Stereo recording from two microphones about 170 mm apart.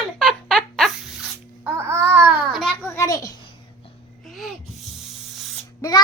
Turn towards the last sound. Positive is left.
turn(degrees=20)  # may be behind; listen again after turning